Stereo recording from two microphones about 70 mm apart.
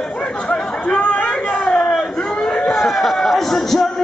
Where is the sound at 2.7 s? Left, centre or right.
Centre.